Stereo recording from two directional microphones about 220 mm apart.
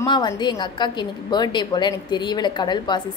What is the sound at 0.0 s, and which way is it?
A woman's voice, 20° left (ahead or behind).